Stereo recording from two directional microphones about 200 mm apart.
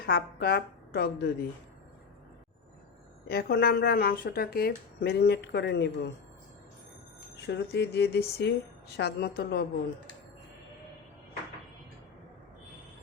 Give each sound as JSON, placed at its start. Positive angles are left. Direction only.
{"t": 0.0, "sound": "a woman's voice", "side_deg": 50}
{"t": 3.2, "sound": "a woman's voice", "side_deg": 50}
{"t": 7.4, "sound": "speech", "side_deg": 55}